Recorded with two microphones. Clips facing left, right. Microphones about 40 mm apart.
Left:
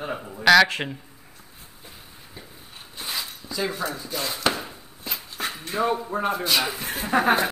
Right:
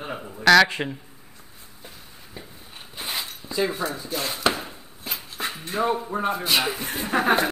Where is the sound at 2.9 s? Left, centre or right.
Centre.